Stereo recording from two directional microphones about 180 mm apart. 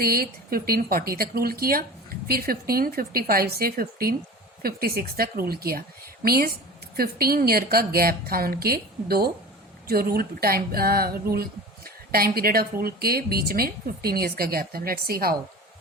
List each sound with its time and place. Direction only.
0.0 s a woman's voice: 55° right (ahead or behind)